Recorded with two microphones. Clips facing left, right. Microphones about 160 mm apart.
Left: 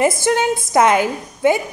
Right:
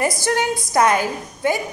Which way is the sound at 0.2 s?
20° left (ahead or behind).